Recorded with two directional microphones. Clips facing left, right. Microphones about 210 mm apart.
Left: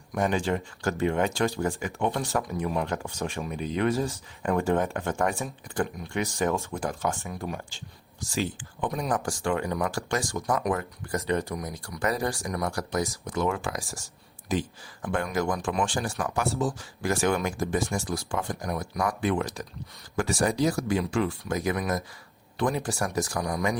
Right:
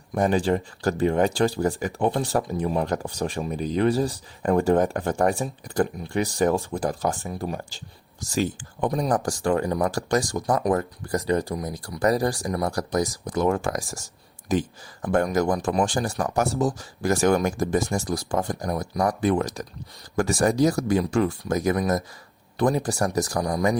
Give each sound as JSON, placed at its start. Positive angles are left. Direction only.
{"t": 0.1, "sound": "speech", "side_deg": -35}